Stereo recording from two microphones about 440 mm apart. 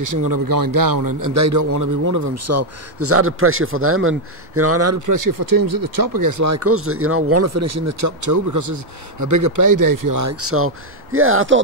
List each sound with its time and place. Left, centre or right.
0.0 s a man's voice: right